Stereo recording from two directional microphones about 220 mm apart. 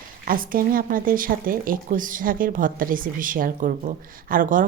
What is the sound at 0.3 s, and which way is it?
A woman's voice, 40° right (ahead or behind).